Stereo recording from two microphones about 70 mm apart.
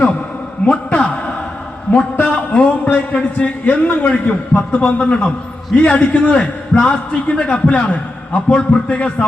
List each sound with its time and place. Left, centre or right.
0.6 s a man's voice: centre